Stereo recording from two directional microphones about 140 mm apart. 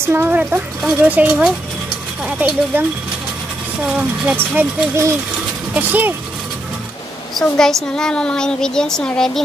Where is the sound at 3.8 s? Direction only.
10° right (ahead or behind).